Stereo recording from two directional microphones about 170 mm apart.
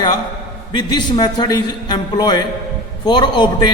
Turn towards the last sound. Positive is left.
turn(degrees=25)  # may be behind; listen again after turning